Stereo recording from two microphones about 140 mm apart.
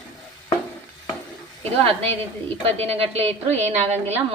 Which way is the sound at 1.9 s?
45° right (ahead or behind).